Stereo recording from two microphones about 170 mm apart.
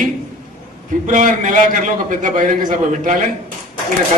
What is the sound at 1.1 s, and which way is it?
A man's voice, 50° right (ahead or behind).